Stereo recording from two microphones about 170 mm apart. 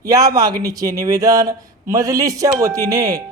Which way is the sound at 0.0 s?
20° right (ahead or behind).